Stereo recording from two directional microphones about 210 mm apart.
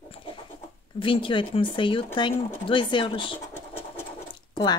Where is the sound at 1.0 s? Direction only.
25° left (ahead or behind).